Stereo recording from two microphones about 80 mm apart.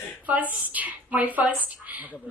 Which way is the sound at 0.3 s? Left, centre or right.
Right.